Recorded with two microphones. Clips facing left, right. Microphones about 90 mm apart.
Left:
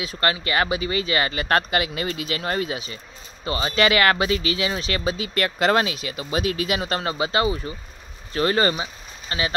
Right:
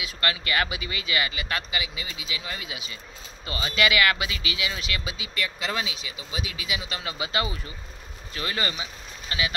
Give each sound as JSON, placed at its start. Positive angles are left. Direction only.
{"t": 0.0, "sound": "speech", "side_deg": 30}
{"t": 7.2, "sound": "speech", "side_deg": 30}